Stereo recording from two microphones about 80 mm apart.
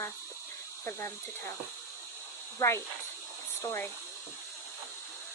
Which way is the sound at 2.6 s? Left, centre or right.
Left.